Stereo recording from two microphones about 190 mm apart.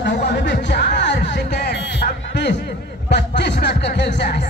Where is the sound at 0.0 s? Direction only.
65° left (ahead or behind).